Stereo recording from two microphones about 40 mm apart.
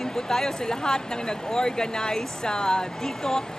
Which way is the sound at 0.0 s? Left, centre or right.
Centre.